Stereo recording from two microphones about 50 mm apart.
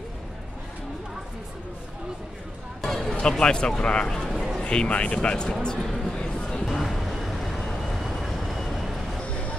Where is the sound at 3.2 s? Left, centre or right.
Centre.